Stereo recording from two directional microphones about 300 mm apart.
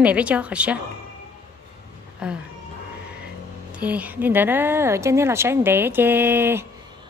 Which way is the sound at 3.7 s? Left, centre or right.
Centre.